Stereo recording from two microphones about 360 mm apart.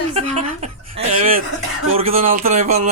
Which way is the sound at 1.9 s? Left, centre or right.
Centre.